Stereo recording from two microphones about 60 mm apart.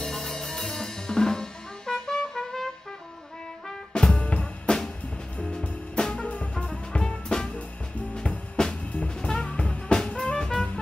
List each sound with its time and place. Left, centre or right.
0.0 s music: centre
3.6 s brass instrument: centre
4.3 s music: centre